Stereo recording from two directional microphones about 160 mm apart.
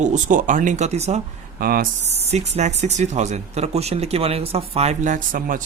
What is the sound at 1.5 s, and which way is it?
Speech, 65° right (ahead or behind).